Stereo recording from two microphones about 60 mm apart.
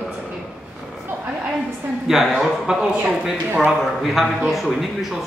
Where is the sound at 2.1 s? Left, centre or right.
Centre.